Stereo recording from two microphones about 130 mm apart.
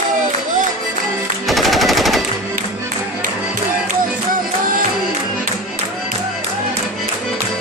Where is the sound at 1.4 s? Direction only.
Centre (ahead or behind).